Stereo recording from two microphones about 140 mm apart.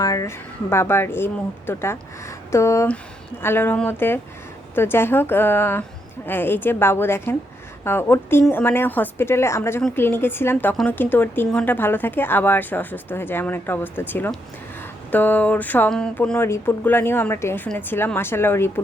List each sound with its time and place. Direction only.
0.0 s speech: 25° left (ahead or behind)